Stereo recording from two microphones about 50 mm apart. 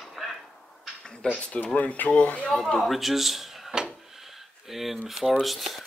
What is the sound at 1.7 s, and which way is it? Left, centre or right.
Speech, left.